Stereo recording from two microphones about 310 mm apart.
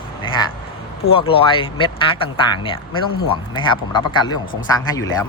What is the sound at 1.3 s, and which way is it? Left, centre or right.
Speech, centre.